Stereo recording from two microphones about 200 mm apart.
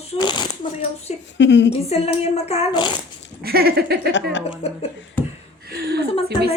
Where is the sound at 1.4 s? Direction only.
60° left (ahead or behind).